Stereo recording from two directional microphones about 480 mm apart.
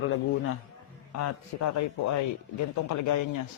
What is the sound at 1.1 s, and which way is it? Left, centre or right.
A man's voice, left.